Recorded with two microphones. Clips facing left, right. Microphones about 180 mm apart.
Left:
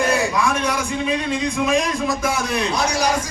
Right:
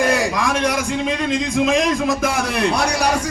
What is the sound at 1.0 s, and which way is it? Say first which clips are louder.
Speech: right 1 dB; 80° right.